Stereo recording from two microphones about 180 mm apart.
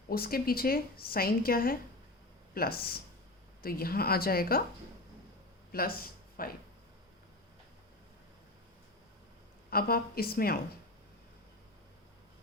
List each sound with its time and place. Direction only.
0.1 s a woman's voice: 55° left (ahead or behind)
5.7 s speech: 55° left (ahead or behind)
9.6 s a woman's voice: 55° left (ahead or behind)